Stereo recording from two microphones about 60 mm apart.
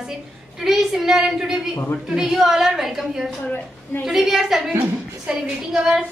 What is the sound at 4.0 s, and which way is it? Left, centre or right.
A woman's voice, centre.